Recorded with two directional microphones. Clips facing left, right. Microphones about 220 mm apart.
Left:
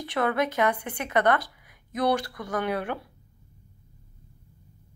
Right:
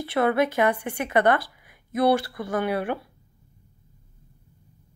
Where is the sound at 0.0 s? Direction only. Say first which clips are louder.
Right 4 dB; 10° right (ahead or behind).